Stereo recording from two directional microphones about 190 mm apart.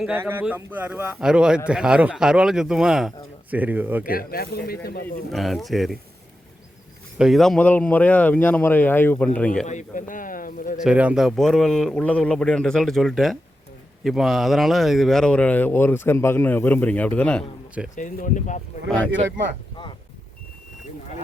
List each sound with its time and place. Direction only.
0.0 s a man's voice: 10° right (ahead or behind)
4.0 s speech: 50° left (ahead or behind)
5.3 s a man's voice: centre (ahead or behind)
7.2 s speech: centre (ahead or behind)
9.6 s speech: 40° left (ahead or behind)
10.8 s a man's voice: 5° right (ahead or behind)
17.9 s speech: 40° left (ahead or behind)
19.7 s a sound: 25° left (ahead or behind)